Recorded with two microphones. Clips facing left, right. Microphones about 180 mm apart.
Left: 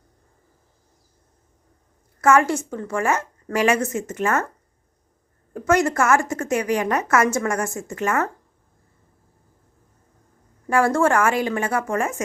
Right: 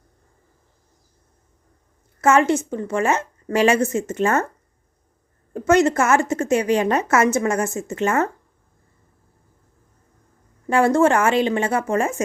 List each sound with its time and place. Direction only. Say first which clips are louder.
2.2 s a woman's voice: right 1 dB; 20° right (ahead or behind)
5.5 s a woman's voice: right 3 dB; 25° right (ahead or behind)
10.7 s a woman's voice: right 2 dB; 20° right (ahead or behind)